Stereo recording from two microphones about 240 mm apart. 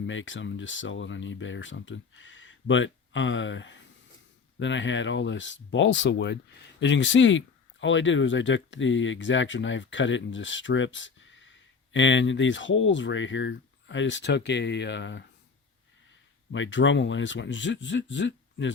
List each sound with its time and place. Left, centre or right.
0.0 s speech: left
16.5 s speech: left